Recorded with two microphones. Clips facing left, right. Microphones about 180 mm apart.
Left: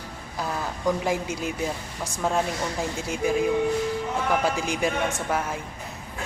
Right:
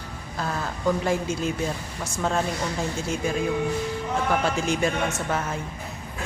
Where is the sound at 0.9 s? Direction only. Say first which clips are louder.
Right 1 dB; 15° left (ahead or behind).